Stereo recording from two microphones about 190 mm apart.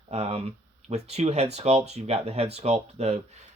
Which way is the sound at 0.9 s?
35° right (ahead or behind).